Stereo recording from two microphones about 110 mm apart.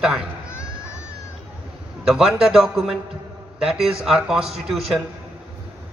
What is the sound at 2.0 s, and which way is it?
A man's voice, 5° right (ahead or behind).